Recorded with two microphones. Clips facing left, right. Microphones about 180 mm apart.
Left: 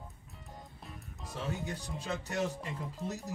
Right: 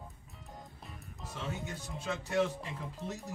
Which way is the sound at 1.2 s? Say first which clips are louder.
Left 2 dB; centre (ahead or behind).